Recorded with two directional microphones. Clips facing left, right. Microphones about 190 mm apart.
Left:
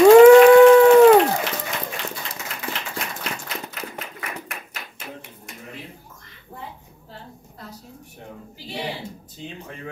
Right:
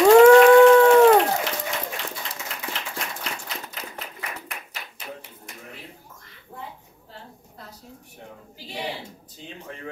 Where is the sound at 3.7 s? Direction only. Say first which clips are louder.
Left 3 dB; 60° left (ahead or behind).